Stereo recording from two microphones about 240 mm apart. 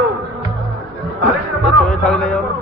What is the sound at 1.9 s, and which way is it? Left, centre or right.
Speech, centre.